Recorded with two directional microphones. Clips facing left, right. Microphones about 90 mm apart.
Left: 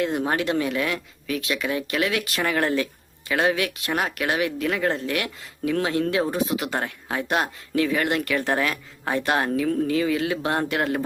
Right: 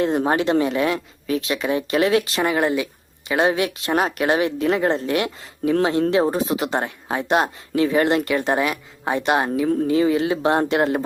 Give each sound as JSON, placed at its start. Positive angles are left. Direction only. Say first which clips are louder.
{"t": 0.0, "sound": "speech", "louder": "right 4 dB", "side_deg": -35}